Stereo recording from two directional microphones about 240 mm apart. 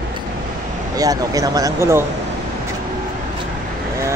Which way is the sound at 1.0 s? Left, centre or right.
Centre.